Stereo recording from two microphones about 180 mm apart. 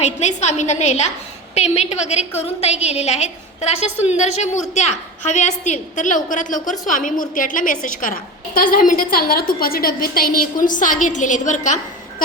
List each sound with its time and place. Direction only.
0.0 s a woman's voice: 40° left (ahead or behind)